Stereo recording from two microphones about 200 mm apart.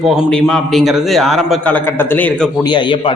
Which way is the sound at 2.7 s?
25° left (ahead or behind).